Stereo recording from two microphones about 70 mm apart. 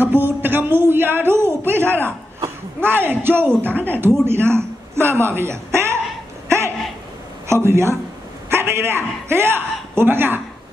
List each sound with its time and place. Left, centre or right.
0.0 s a woman's voice: right
7.4 s speech: right